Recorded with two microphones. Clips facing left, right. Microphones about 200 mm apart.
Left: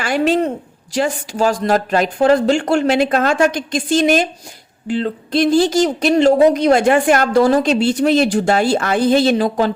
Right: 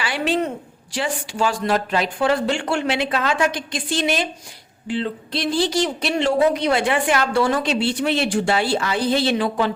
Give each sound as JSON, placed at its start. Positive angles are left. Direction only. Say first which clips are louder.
{"t": 0.0, "sound": "a woman's voice", "louder": "left 6 dB", "side_deg": 45}